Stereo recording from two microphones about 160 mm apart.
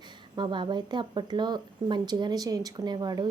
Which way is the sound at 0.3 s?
30° right (ahead or behind).